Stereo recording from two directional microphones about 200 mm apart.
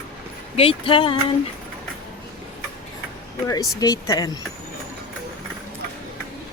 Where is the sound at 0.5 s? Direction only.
25° left (ahead or behind).